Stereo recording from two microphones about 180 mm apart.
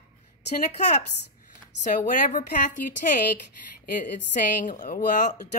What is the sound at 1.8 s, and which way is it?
A woman's voice, 45° left (ahead or behind).